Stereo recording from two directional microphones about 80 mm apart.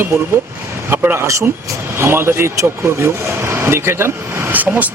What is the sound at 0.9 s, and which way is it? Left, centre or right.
Speech, right.